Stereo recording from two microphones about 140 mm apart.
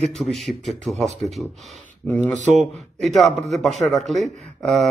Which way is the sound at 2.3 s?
60° right (ahead or behind).